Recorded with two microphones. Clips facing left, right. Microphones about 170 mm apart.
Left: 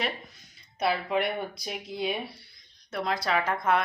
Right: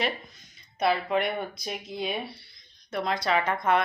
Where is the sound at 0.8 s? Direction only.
5° left (ahead or behind).